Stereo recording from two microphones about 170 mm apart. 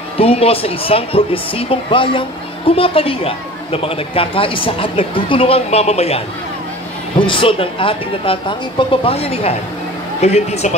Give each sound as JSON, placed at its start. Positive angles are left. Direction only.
{"t": 0.2, "sound": "speech", "side_deg": 35}